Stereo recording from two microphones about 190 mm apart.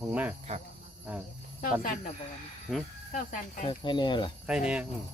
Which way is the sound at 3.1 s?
45° left (ahead or behind).